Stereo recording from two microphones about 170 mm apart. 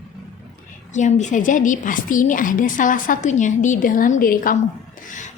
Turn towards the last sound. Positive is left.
turn(degrees=45)  # may be behind; listen again after turning